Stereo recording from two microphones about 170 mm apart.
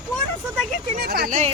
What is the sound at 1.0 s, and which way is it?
Speech, 65° right (ahead or behind).